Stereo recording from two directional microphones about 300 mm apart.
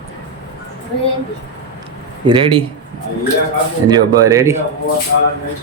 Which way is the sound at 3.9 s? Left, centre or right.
Centre.